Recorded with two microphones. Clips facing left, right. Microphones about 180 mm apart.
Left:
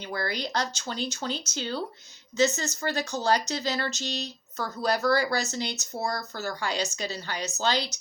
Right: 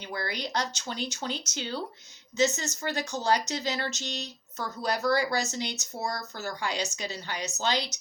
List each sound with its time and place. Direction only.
0.1 s speech: 15° right (ahead or behind)